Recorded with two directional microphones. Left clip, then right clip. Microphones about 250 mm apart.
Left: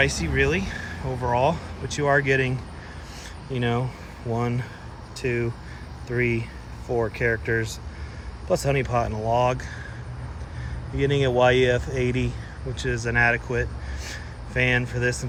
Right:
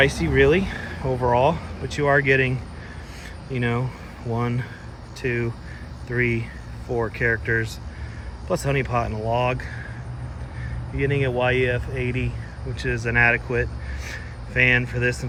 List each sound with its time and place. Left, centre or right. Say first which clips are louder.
0.0 s speech: right 4 dB; centre
10.9 s speech: left 2 dB; centre